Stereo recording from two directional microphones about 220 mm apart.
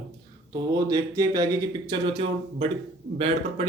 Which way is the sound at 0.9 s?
15° right (ahead or behind).